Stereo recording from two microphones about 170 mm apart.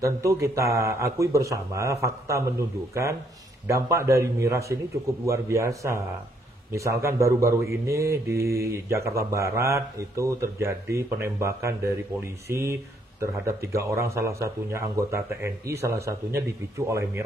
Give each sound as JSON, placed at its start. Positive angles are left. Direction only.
{"t": 0.0, "sound": "speech", "side_deg": -20}